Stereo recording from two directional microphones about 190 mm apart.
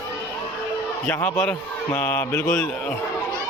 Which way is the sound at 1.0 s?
10° left (ahead or behind).